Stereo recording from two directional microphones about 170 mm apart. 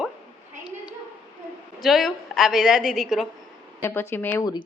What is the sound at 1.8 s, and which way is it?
A woman's voice, centre (ahead or behind).